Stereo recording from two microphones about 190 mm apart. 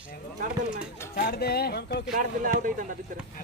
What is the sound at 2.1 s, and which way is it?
Speech, 45° right (ahead or behind).